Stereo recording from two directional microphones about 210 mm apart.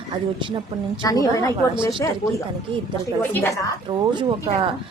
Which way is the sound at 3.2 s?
15° left (ahead or behind).